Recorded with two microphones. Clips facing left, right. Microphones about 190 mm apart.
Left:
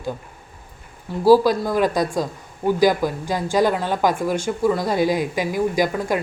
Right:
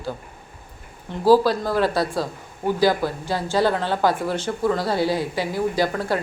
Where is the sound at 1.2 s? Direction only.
10° left (ahead or behind).